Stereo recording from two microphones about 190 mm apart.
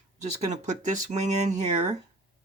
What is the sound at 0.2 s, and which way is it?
Speech, 40° right (ahead or behind).